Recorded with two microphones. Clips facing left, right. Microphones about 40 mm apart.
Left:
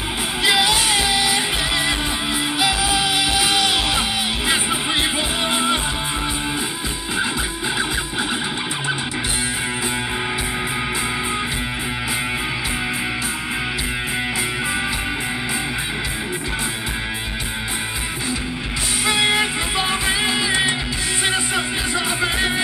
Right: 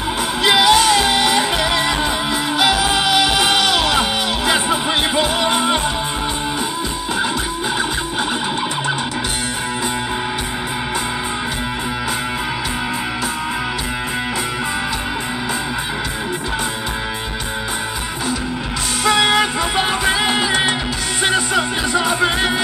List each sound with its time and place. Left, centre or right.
0.4 s music: right
19.8 s music: right
21.9 s music: right